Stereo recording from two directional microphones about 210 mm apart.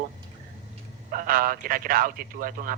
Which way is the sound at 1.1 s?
40° right (ahead or behind).